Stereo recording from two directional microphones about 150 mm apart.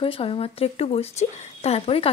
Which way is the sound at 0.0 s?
40° left (ahead or behind).